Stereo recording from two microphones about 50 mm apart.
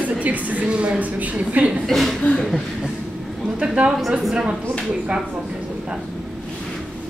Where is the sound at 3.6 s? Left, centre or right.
Right.